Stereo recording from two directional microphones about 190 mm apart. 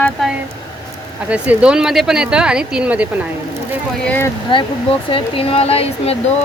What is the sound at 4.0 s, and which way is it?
Speech, 10° left (ahead or behind).